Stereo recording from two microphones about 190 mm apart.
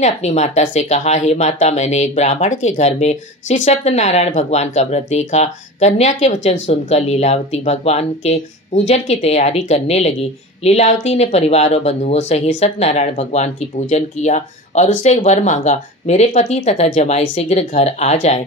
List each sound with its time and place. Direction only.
0.0 s speech: 35° left (ahead or behind)